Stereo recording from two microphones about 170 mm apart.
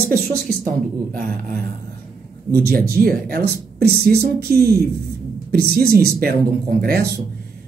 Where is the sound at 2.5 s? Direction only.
60° right (ahead or behind).